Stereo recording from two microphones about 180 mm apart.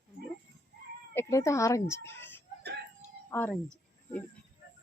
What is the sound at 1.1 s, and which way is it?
Speech, 15° left (ahead or behind).